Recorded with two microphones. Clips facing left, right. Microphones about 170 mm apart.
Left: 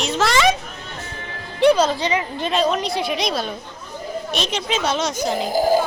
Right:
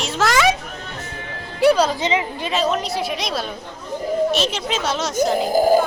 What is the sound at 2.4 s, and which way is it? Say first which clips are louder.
A woman's voice: left 1 dB; 5° right (ahead or behind).